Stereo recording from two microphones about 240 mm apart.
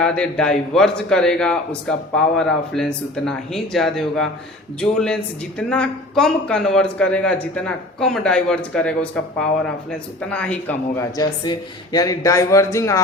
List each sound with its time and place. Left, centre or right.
0.0 s speech: centre